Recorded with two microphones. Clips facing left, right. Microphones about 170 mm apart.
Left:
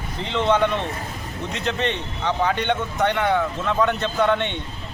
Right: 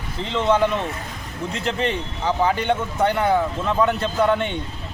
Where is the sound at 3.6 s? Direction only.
5° right (ahead or behind).